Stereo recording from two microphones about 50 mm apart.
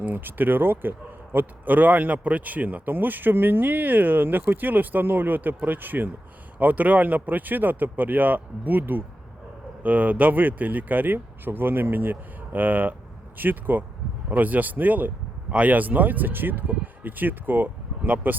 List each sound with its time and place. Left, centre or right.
0.0 s a man's voice: right